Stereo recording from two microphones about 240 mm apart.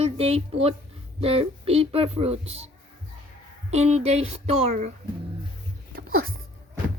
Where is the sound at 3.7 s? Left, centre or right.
Right.